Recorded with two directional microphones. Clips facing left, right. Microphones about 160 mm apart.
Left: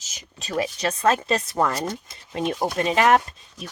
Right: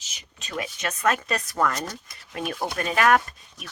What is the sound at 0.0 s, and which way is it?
Speech, 40° left (ahead or behind).